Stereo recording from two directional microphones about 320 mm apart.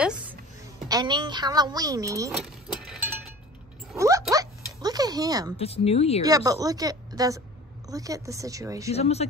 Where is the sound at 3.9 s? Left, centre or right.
Centre.